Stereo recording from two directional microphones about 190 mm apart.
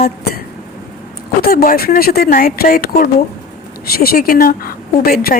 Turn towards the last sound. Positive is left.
turn(degrees=50)  # may be behind; listen again after turning